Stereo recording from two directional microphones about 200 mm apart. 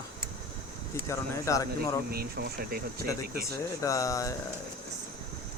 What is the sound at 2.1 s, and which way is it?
Speech, 50° right (ahead or behind).